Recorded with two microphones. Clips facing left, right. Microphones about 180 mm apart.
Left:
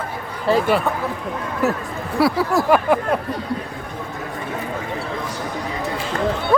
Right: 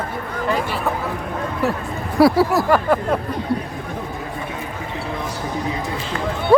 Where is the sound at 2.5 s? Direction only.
5° left (ahead or behind).